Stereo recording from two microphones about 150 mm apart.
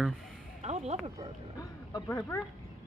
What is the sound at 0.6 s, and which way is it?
Speech, 50° right (ahead or behind).